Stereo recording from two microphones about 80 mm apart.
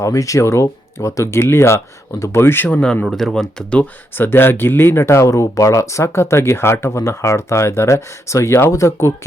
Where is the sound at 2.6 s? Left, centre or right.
Centre.